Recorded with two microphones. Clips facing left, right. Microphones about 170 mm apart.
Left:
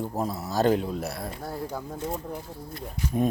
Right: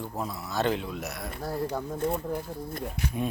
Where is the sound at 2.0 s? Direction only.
55° right (ahead or behind).